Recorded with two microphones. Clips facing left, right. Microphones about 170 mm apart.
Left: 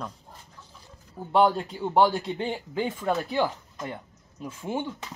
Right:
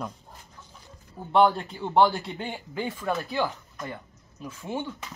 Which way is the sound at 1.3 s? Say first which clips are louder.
Right 1 dB; 10° left (ahead or behind).